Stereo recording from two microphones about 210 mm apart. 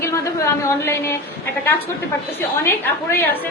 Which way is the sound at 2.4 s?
10° left (ahead or behind).